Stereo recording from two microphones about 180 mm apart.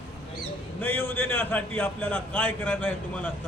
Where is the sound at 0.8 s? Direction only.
10° left (ahead or behind).